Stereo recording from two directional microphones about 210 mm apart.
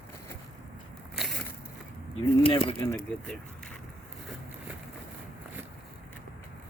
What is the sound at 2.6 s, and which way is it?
Speech, 20° left (ahead or behind).